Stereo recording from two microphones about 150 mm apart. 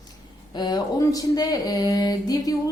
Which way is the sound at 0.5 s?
30° left (ahead or behind).